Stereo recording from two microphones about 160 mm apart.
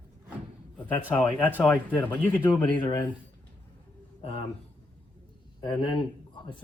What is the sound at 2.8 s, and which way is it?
Speech, 30° left (ahead or behind).